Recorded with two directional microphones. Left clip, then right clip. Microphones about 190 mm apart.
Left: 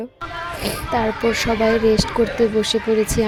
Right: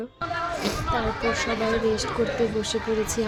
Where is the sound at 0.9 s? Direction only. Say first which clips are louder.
Left 8 dB; 35° left (ahead or behind).